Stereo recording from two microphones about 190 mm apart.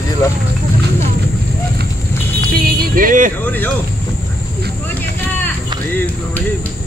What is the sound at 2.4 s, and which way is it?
Vehicle, 50° right (ahead or behind).